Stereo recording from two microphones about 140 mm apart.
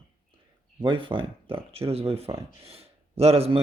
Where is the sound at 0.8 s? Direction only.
35° right (ahead or behind).